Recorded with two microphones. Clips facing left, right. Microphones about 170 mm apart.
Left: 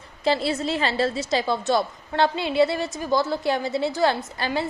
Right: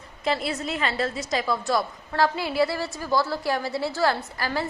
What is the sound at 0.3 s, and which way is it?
A woman's voice, 30° left (ahead or behind).